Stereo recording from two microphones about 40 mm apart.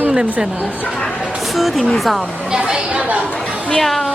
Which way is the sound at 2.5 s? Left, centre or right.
Centre.